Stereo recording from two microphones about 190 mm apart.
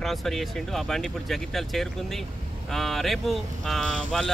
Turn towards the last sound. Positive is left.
turn(degrees=0)  # may be behind; listen again after turning